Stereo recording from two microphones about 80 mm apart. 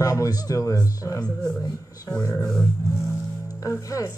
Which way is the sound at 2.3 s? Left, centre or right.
Centre.